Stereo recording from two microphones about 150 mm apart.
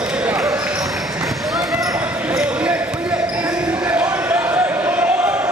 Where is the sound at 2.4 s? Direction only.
10° right (ahead or behind).